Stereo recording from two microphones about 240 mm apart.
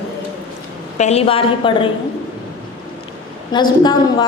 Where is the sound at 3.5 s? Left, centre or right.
Centre.